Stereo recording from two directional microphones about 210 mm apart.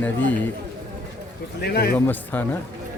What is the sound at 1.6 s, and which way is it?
Speech, 50° left (ahead or behind).